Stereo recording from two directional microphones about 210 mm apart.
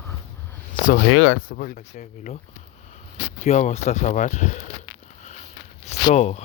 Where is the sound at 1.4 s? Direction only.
45° left (ahead or behind).